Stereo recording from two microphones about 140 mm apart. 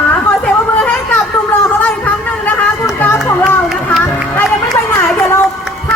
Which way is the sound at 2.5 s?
15° left (ahead or behind).